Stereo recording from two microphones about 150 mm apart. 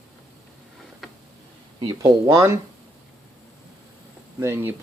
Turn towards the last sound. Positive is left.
turn(degrees=-15)  # may be behind; listen again after turning